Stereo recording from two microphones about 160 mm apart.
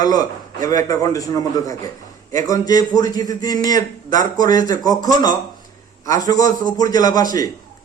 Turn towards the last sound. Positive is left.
turn(degrees=25)  # may be behind; listen again after turning